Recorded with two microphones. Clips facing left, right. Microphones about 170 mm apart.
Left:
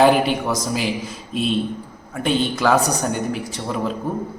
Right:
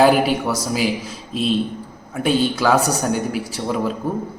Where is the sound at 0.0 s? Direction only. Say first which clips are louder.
Right 1 dB; 5° right (ahead or behind).